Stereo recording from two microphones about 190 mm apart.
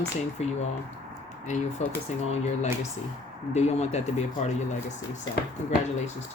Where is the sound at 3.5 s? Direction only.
35° left (ahead or behind).